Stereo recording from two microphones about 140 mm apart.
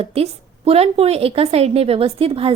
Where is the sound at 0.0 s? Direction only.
45° right (ahead or behind).